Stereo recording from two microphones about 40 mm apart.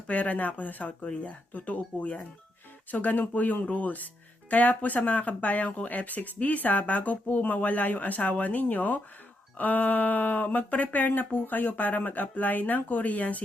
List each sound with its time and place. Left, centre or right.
0.1 s speech: left